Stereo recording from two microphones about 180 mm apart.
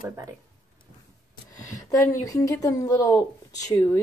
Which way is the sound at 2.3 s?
20° left (ahead or behind).